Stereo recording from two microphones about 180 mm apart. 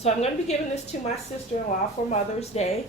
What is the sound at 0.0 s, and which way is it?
A woman's voice, 35° left (ahead or behind).